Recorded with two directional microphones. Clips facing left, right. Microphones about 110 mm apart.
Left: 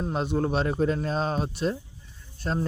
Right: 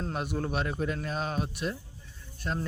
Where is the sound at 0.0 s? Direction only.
25° left (ahead or behind).